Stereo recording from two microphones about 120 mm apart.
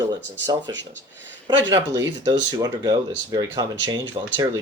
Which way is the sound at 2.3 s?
35° right (ahead or behind).